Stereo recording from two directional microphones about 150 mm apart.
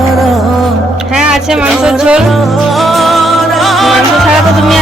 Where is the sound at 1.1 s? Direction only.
5° right (ahead or behind).